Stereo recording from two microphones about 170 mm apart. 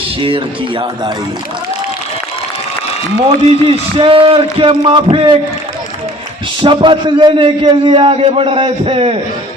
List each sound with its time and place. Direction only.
0.2 s speech: 30° right (ahead or behind)
3.2 s a man's voice: 35° right (ahead or behind)
6.6 s a man's voice: 30° right (ahead or behind)